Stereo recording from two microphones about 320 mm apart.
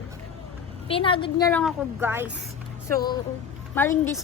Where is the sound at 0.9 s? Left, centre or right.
Centre.